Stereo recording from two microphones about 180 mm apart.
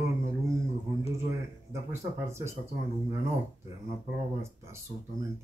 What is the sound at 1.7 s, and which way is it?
Speech, 15° right (ahead or behind).